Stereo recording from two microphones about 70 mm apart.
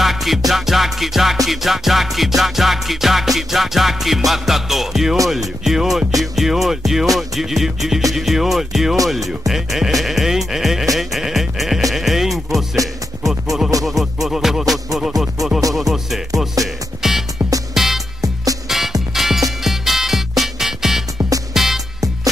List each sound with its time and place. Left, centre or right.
0.0 s music: centre
11.0 s sheep: centre
13.3 s music: centre
16.6 s music: right
17.0 s music: centre
17.4 s music: right
17.7 s music: centre
18.2 s music: right
18.7 s music: centre